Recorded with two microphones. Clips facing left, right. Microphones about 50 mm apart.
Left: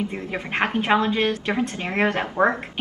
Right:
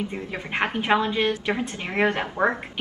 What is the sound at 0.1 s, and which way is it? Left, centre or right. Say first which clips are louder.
Speech: left 2 dB; centre.